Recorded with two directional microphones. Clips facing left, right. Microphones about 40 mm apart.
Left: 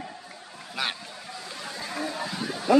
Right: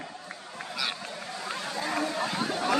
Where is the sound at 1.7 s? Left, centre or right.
Right.